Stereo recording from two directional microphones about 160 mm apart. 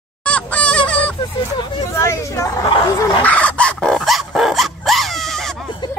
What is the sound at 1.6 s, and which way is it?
Speech, 20° left (ahead or behind).